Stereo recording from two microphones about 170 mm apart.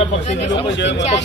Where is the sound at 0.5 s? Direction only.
90° left.